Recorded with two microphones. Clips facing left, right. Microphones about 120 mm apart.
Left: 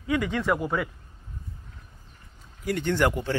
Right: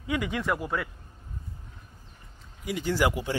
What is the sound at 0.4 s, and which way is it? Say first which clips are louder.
Speech: left 3 dB; centre (ahead or behind).